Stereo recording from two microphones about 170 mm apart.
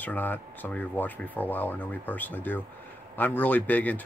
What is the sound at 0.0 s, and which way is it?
Speech, 10° left (ahead or behind).